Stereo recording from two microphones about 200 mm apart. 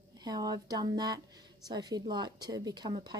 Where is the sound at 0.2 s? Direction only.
20° right (ahead or behind).